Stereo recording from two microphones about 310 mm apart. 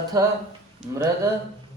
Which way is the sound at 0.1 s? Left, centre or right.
Centre.